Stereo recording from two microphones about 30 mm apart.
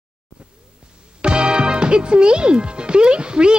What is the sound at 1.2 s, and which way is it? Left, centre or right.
Speech, right.